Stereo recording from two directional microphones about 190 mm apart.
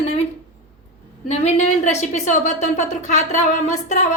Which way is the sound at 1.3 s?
35° left (ahead or behind).